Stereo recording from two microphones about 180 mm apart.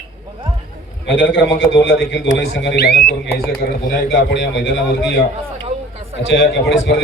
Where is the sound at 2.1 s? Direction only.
90° left; by 3.0 s 60° left (ahead or behind).